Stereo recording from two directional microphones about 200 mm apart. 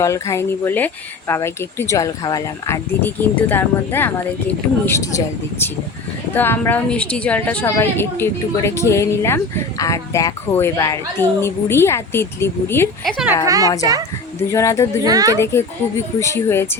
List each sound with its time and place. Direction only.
0.0 s a woman's voice: 15° left (ahead or behind)
13.4 s speech: 15° right (ahead or behind)
14.5 s a woman's voice: 15° left (ahead or behind)
15.0 s speech: 20° right (ahead or behind)
16.2 s a woman's voice: 10° left (ahead or behind)